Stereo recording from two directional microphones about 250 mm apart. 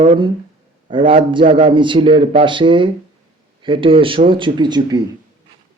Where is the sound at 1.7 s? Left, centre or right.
Centre.